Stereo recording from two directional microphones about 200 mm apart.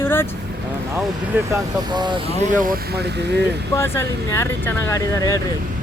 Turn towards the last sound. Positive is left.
turn(degrees=15)  # may be behind; listen again after turning